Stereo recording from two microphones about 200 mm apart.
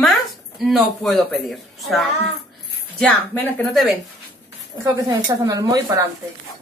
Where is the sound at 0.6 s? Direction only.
Centre (ahead or behind).